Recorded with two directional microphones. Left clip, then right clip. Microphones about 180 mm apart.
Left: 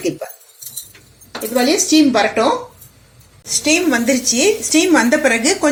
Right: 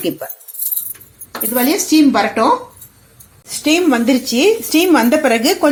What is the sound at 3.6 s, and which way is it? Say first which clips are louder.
Speech: right 2 dB; 40° right (ahead or behind).